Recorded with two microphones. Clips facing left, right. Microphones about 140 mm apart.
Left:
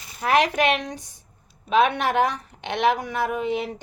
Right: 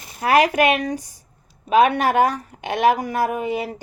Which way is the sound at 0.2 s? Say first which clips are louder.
Right 4 dB; 10° right (ahead or behind).